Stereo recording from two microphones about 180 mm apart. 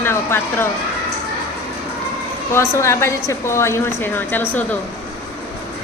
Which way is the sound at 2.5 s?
15° left (ahead or behind).